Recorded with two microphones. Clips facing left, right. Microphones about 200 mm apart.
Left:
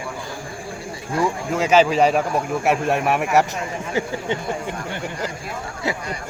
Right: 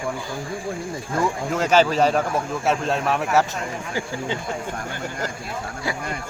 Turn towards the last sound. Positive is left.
turn(degrees=25)  # may be behind; listen again after turning